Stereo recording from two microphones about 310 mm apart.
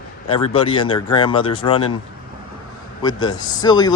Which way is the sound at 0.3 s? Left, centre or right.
Centre.